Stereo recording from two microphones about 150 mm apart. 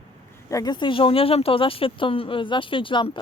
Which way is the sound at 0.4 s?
25° left (ahead or behind).